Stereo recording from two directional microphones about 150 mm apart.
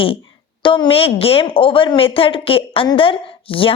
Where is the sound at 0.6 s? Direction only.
35° left (ahead or behind).